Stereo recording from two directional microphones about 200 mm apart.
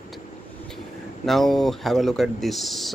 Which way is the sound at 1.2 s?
Centre (ahead or behind).